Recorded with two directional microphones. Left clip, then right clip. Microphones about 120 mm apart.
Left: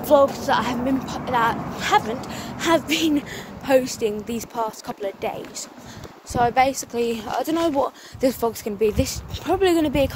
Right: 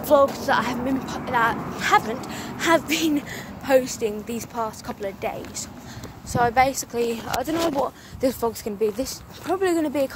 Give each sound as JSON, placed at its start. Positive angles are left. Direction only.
{"t": 0.0, "sound": "speech", "side_deg": 10}
{"t": 1.8, "sound": "speech", "side_deg": 0}
{"t": 7.1, "sound": "speech", "side_deg": 20}